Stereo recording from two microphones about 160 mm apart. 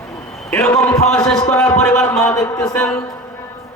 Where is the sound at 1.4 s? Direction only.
5° left (ahead or behind).